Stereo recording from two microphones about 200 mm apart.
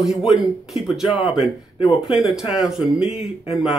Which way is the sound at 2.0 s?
25° left (ahead or behind).